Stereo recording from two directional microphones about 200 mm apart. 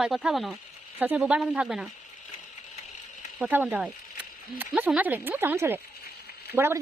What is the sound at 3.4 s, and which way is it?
Speech, 10° right (ahead or behind).